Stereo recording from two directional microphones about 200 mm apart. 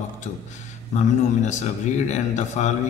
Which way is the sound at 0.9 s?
35° left (ahead or behind).